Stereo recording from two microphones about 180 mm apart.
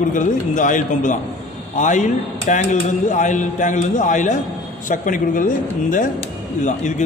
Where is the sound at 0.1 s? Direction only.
45° left (ahead or behind).